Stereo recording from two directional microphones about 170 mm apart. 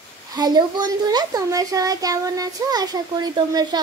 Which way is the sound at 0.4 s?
25° right (ahead or behind).